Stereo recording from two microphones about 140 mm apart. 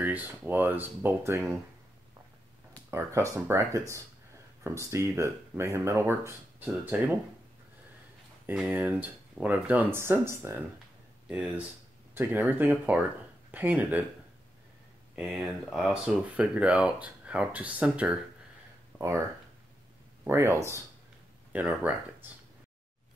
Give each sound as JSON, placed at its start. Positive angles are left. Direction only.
{"t": 0.0, "sound": "speech", "side_deg": -10}
{"t": 2.9, "sound": "speech", "side_deg": -20}
{"t": 8.5, "sound": "speech", "side_deg": -10}
{"t": 15.1, "sound": "speech", "side_deg": -5}
{"t": 18.9, "sound": "speech", "side_deg": -20}
{"t": 20.2, "sound": "speech", "side_deg": -20}